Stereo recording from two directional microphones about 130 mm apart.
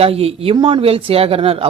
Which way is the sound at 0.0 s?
50° right (ahead or behind).